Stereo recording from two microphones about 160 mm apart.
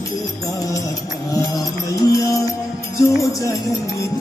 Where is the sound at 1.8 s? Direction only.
20° left (ahead or behind).